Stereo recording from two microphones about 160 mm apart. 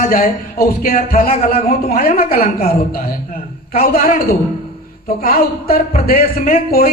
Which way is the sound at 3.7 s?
65° left (ahead or behind).